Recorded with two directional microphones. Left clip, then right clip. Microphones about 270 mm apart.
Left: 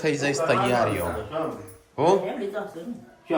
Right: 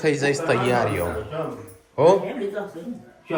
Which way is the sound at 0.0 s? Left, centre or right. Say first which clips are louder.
Right 2 dB; centre.